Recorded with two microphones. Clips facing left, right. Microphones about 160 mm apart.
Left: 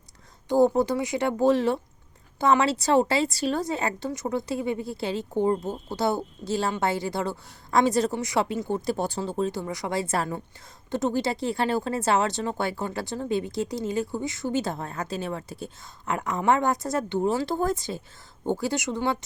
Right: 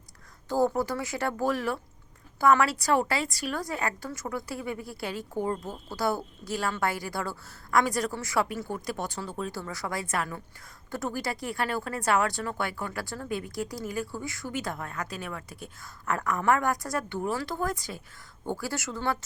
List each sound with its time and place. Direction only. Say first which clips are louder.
0.4 s a woman's voice: left 5 dB; 20° left (ahead or behind)